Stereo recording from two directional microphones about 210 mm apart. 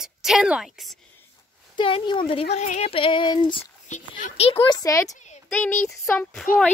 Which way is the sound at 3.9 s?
35° left (ahead or behind).